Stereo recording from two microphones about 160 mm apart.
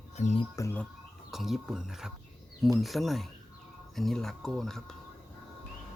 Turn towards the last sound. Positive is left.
turn(degrees=5)  # may be behind; listen again after turning